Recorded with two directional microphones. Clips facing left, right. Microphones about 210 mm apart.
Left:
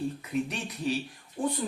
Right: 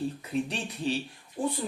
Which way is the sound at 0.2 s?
30° right (ahead or behind).